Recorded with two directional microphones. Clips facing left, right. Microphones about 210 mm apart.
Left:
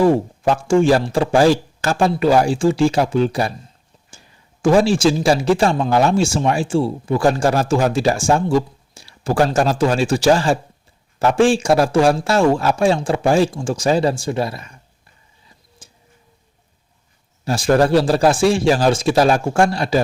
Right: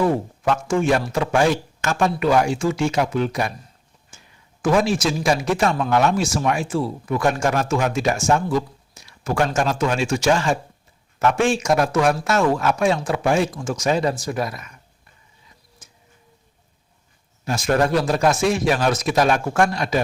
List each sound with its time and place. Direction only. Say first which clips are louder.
0.0 s speech: left 5 dB; 30° left (ahead or behind)
4.6 s speech: left 5 dB; 30° left (ahead or behind)
15.8 s tick-tock: left 5 dB; 30° left (ahead or behind)
17.4 s speech: left 4 dB; 35° left (ahead or behind)